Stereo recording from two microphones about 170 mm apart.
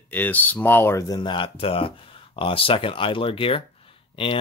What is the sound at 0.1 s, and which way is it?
Speech, 10° left (ahead or behind).